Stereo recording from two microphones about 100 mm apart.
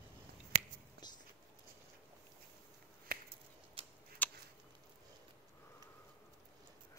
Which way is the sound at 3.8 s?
65° right (ahead or behind).